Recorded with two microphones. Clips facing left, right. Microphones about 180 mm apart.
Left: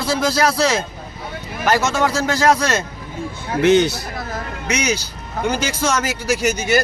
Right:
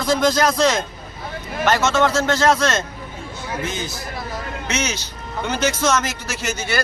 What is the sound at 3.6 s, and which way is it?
Speech, 70° left (ahead or behind).